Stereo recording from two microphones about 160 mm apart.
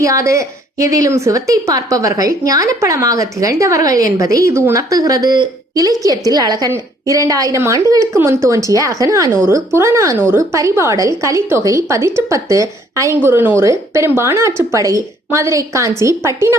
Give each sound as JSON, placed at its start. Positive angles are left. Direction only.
{"t": 0.0, "sound": "a woman's voice", "side_deg": -20}